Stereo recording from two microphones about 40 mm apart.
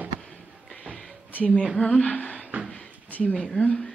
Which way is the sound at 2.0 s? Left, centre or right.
Left.